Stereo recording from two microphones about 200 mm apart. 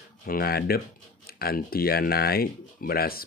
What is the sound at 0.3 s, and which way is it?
Speech, 50° left (ahead or behind).